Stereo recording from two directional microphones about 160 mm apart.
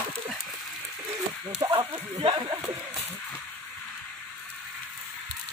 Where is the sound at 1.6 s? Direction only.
25° right (ahead or behind).